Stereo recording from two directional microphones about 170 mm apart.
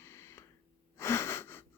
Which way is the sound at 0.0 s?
15° left (ahead or behind).